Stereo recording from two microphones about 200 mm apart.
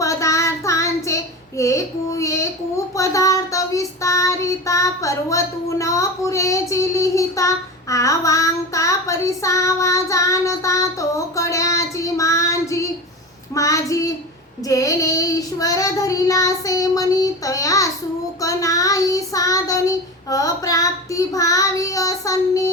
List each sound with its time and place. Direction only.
0.0 s child singing: 15° left (ahead or behind)